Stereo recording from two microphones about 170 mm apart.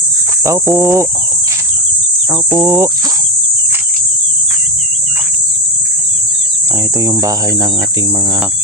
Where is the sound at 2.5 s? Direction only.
20° right (ahead or behind).